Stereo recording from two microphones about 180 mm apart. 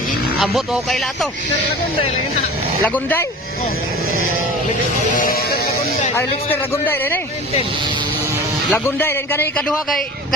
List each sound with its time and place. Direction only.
0.3 s speech: centre (ahead or behind)
2.8 s speech: 10° left (ahead or behind)
5.1 s sheep: 50° left (ahead or behind)
6.1 s speech: 10° left (ahead or behind)
8.7 s speech: 10° left (ahead or behind)